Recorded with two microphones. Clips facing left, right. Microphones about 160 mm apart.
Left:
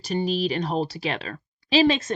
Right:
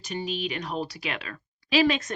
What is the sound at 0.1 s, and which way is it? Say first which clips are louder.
Speech: left 7 dB; 35° left (ahead or behind).